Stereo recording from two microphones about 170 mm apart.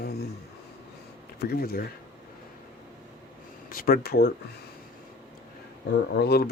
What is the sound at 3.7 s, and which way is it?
Speech, 60° left (ahead or behind).